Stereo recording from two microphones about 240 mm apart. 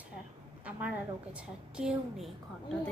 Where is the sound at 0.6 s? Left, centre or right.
Centre.